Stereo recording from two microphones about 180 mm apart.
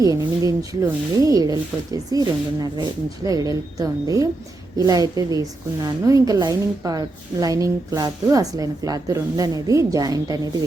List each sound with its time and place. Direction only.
0.0 s a woman's voice: 20° right (ahead or behind)